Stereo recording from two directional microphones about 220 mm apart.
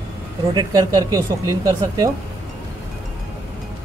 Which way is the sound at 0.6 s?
15° right (ahead or behind).